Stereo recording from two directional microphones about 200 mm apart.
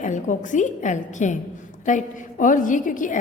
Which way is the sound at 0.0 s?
40° left (ahead or behind).